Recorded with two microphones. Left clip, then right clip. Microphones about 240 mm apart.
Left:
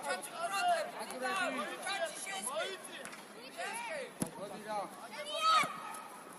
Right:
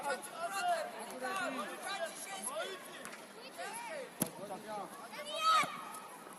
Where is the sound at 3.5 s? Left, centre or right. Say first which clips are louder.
Left 4 dB; centre.